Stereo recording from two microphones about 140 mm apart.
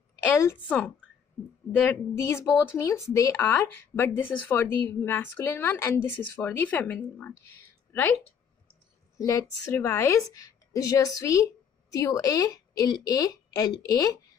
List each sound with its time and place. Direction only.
0.4 s speech: 15° left (ahead or behind)
9.2 s a woman's voice: 25° left (ahead or behind)